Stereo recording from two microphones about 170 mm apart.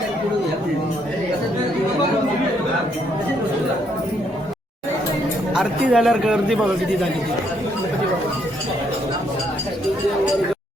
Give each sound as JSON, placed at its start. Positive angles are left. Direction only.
{"t": 5.5, "sound": "speech", "side_deg": 0}